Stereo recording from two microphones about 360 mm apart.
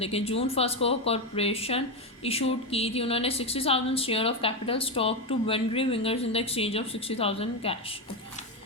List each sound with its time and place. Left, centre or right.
0.0 s a woman's voice: centre